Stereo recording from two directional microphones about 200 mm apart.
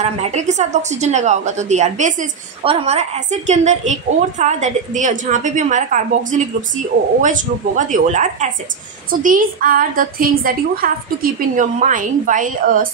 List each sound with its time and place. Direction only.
0.0 s a woman's voice: 35° right (ahead or behind)